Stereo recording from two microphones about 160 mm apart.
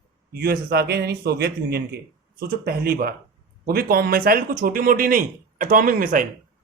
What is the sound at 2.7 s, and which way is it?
Speech, 65° right (ahead or behind).